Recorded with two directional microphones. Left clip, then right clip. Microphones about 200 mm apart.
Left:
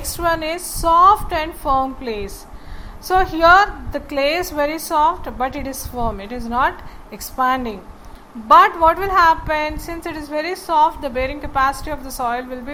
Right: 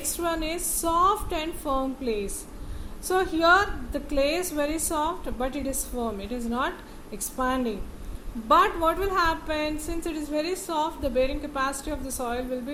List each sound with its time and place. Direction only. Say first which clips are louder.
0.2 s a woman's voice: left 9 dB; 20° left (ahead or behind)